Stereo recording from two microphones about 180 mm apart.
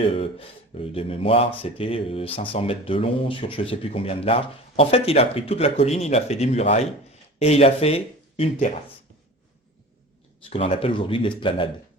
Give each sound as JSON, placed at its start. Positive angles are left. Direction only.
{"t": 0.1, "sound": "speech", "side_deg": 30}
{"t": 10.5, "sound": "speech", "side_deg": 35}